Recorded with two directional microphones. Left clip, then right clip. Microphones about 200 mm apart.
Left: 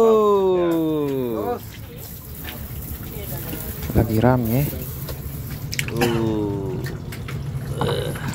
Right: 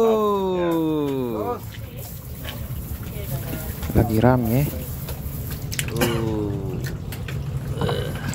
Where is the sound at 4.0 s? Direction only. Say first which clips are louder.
Even; centre (ahead or behind).